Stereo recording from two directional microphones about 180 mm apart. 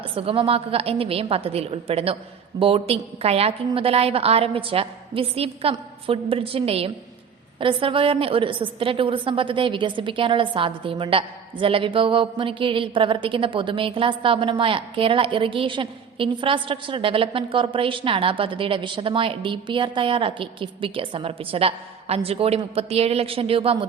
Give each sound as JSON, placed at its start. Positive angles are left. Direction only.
{"t": 0.0, "sound": "a woman's voice", "side_deg": -30}